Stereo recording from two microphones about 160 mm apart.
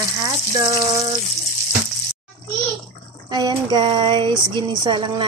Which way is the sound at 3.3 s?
25° right (ahead or behind).